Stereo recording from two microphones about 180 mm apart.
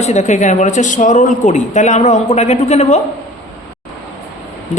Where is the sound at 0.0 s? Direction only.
40° left (ahead or behind).